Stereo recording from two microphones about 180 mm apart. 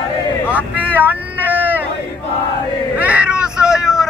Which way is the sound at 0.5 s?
10° right (ahead or behind).